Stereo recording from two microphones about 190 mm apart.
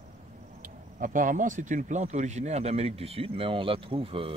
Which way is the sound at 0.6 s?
45° right (ahead or behind).